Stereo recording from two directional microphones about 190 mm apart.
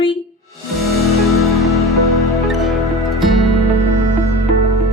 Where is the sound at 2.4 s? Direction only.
Centre (ahead or behind).